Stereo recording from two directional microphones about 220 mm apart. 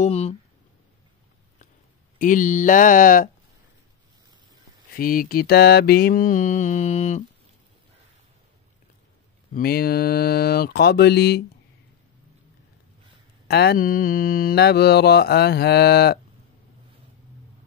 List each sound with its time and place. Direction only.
0.0 s a sound: 30° left (ahead or behind)
2.1 s mantra: 35° left (ahead or behind)
4.9 s mantra: 40° left (ahead or behind)
9.5 s mantra: 45° left (ahead or behind)
13.5 s mantra: 45° left (ahead or behind)